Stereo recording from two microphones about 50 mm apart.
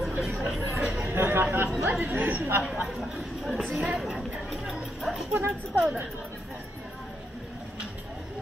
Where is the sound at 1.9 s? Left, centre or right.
Right.